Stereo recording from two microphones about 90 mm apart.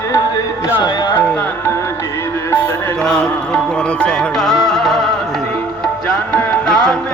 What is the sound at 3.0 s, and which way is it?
Music, 5° left (ahead or behind).